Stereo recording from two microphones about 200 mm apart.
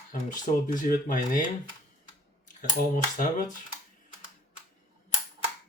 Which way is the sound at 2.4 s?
40° left (ahead or behind).